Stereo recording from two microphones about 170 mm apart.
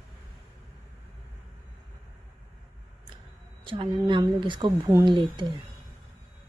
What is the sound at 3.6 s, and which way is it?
Speech, 30° right (ahead or behind).